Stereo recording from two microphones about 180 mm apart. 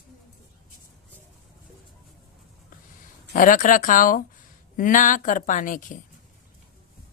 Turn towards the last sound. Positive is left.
turn(degrees=50)  # may be behind; listen again after turning